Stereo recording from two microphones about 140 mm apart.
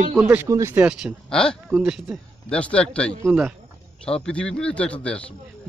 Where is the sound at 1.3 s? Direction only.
5° left (ahead or behind).